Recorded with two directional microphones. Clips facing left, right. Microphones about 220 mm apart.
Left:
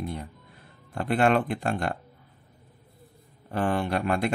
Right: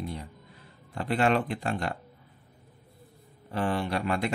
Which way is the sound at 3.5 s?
50° left (ahead or behind).